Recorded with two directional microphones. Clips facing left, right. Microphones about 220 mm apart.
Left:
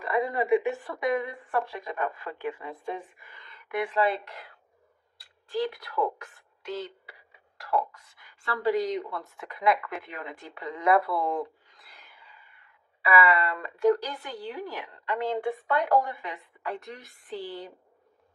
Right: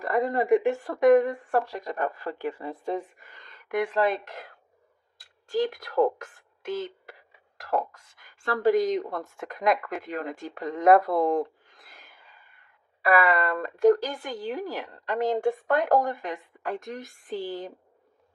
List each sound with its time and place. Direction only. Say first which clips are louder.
0.0 s a woman's voice: right 2 dB; 45° right (ahead or behind)
10.4 s a sound: right 5 dB; 45° right (ahead or behind)
13.0 s a woman's voice: right 2 dB; 50° right (ahead or behind)